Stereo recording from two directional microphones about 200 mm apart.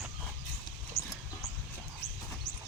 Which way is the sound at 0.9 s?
50° left (ahead or behind).